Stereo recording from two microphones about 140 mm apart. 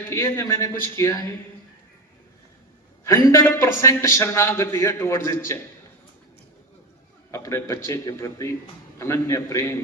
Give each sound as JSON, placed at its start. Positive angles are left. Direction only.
{"t": 0.1, "sound": "a man's voice", "side_deg": 20}
{"t": 3.3, "sound": "a man's voice", "side_deg": 20}
{"t": 7.3, "sound": "a man's voice", "side_deg": 20}